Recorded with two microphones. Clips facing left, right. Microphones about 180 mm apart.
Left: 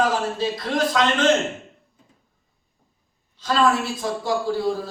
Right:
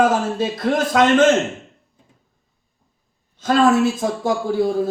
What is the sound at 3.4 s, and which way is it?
Speech, 50° right (ahead or behind).